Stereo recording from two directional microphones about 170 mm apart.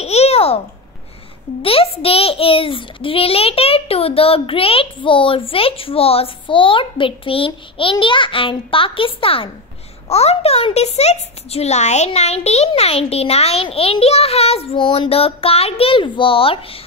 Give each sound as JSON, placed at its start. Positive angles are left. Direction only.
{"t": 0.0, "sound": "babbling", "side_deg": 40}
{"t": 1.6, "sound": "a child's voice", "side_deg": 35}